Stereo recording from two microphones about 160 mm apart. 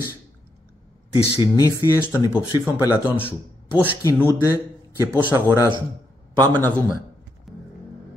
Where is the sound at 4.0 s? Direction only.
20° left (ahead or behind).